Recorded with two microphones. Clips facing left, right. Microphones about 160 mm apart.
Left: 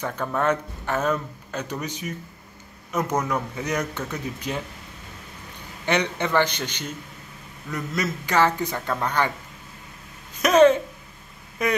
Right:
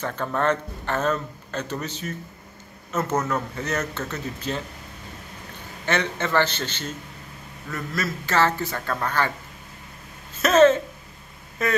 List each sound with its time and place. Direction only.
0.0 s speech: 10° left (ahead or behind)
5.9 s speech: 15° left (ahead or behind)
10.3 s a sound: 15° left (ahead or behind)
11.6 s speech: 15° left (ahead or behind)